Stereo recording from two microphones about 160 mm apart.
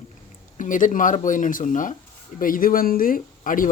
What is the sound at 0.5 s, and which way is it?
Speech, 55° left (ahead or behind).